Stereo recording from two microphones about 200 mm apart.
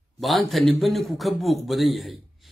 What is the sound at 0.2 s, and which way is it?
A man's voice, centre (ahead or behind).